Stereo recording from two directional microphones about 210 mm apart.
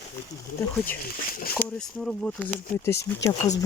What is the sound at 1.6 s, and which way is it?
Speech, 5° left (ahead or behind).